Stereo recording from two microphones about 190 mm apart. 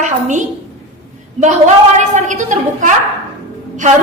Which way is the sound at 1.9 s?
40° right (ahead or behind).